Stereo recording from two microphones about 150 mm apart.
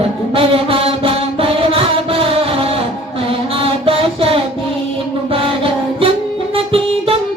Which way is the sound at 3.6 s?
40° right (ahead or behind).